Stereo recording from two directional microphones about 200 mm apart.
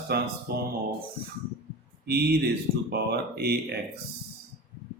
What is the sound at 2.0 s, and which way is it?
Speech, 55° right (ahead or behind).